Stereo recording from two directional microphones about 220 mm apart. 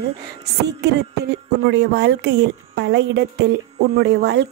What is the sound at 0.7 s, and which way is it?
Speech, 50° right (ahead or behind).